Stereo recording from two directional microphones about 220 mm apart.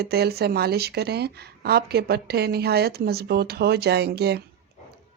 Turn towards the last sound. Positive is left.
turn(degrees=-50)  # may be behind; listen again after turning